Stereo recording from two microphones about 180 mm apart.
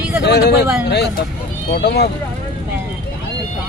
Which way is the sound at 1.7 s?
60° left (ahead or behind).